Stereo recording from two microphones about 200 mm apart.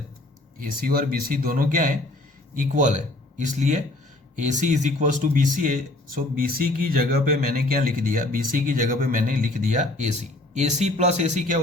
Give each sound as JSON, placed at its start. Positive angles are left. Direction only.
{"t": 0.6, "sound": "speech", "side_deg": -45}